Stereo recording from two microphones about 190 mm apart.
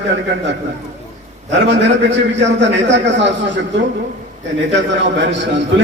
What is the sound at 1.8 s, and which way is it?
A man's voice, 70° right (ahead or behind).